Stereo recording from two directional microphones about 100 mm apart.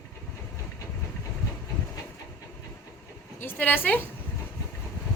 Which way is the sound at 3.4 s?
15° left (ahead or behind).